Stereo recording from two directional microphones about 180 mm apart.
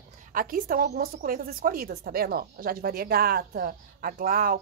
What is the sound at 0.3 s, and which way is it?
A woman's voice, 50° right (ahead or behind).